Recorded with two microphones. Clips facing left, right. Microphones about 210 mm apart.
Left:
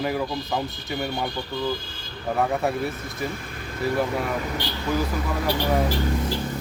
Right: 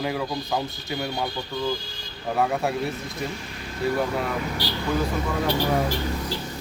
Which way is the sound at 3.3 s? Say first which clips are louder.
Left 1 dB; 55° left (ahead or behind).